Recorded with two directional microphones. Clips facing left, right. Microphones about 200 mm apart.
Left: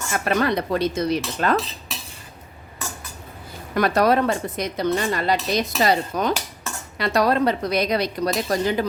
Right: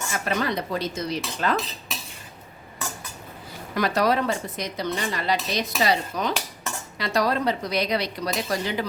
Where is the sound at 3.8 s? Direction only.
55° left (ahead or behind).